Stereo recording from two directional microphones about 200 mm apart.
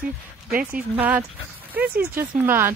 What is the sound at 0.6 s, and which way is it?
Speech, 5° right (ahead or behind).